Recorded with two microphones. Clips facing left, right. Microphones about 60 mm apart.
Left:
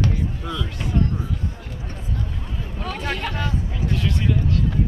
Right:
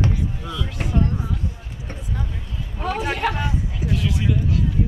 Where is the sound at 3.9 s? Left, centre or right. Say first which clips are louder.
Even; centre.